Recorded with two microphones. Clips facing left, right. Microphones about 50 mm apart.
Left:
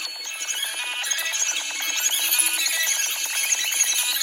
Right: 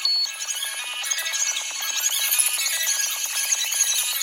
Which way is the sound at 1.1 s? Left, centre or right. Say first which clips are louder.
Left 1 dB; left.